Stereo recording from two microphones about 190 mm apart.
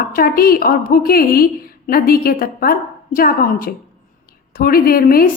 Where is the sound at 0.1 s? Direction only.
50° left (ahead or behind).